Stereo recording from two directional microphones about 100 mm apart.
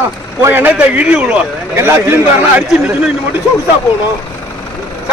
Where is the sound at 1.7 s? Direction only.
25° right (ahead or behind).